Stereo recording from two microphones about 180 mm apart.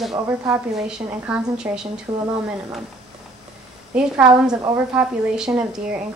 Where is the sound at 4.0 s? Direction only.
5° right (ahead or behind).